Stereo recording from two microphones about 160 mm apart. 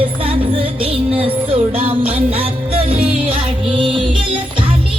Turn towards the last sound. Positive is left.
turn(degrees=-30)  # may be behind; listen again after turning